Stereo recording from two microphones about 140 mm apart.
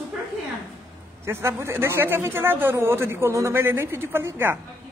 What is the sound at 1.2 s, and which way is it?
A man's voice, 20° right (ahead or behind).